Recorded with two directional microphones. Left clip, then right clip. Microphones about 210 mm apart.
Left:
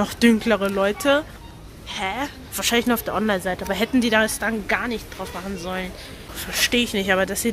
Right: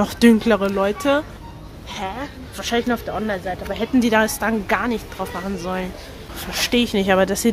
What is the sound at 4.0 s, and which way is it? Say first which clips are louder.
Speech: right 3 dB; 5° right (ahead or behind).